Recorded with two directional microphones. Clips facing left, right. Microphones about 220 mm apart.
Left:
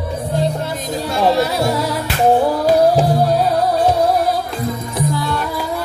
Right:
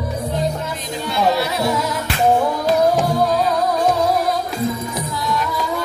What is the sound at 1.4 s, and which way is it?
Music, 35° left (ahead or behind).